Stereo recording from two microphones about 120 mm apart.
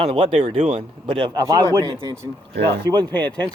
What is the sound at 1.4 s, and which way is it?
Speech, 25° right (ahead or behind).